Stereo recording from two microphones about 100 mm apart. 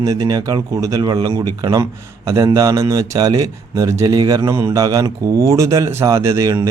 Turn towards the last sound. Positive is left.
turn(degrees=-30)  # may be behind; listen again after turning